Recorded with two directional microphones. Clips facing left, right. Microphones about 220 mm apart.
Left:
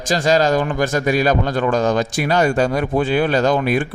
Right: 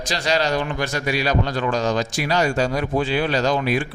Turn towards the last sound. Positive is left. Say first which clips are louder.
# left 4 dB
turn(degrees=50)  # may be behind; listen again after turning